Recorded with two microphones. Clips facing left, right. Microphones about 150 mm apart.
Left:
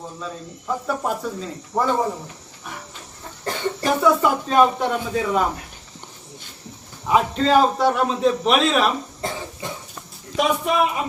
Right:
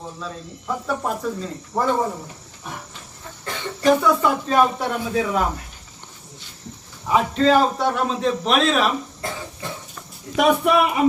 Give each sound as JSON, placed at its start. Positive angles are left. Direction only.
{"t": 0.2, "sound": "cricket", "side_deg": 0}
{"t": 3.5, "sound": "a sound", "side_deg": 40}
{"t": 3.8, "sound": "cricket", "side_deg": 5}
{"t": 7.1, "sound": "cricket", "side_deg": 0}
{"t": 10.3, "sound": "speech", "side_deg": -65}